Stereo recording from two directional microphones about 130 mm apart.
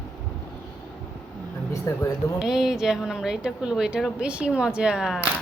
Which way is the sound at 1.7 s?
20° left (ahead or behind).